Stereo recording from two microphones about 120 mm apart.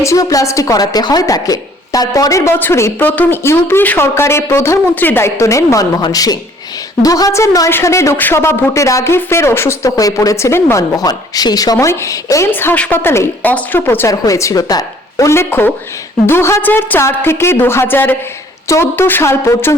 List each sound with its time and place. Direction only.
0.0 s a woman's voice: 25° left (ahead or behind)
12.5 s a woman's voice: 15° left (ahead or behind)